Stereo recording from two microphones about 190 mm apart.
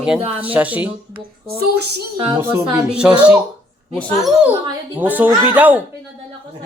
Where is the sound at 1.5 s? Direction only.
55° right (ahead or behind).